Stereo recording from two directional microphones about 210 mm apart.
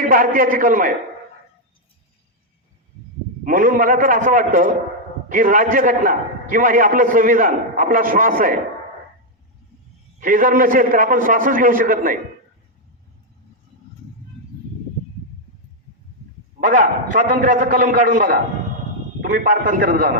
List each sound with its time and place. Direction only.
0.0 s a man's voice: 40° right (ahead or behind)
3.4 s a man's voice: 40° right (ahead or behind)
10.2 s a man's voice: 40° right (ahead or behind)
16.6 s a man's voice: 40° right (ahead or behind)